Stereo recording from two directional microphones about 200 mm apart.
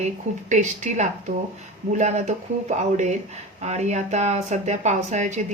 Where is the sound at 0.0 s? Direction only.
35° right (ahead or behind).